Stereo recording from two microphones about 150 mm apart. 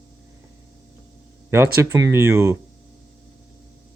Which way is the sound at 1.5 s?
15° right (ahead or behind).